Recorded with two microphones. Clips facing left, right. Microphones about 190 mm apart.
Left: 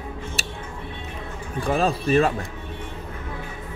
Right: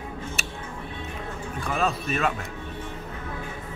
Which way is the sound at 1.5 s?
35° left (ahead or behind).